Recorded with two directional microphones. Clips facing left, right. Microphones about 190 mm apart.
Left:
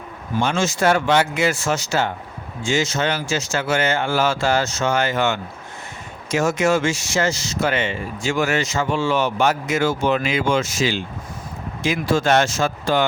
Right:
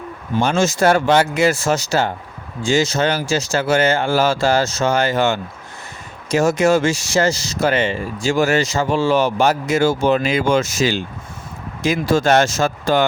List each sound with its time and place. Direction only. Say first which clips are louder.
0.4 s speech: right 3 dB; 40° right (ahead or behind)